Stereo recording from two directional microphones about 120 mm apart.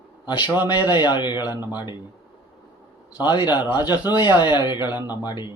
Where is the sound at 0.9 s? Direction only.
40° left (ahead or behind).